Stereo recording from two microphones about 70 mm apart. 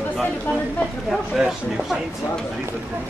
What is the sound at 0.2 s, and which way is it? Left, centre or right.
Speech, centre.